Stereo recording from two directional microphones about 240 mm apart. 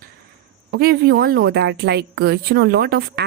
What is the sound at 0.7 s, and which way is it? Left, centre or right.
Speech, right.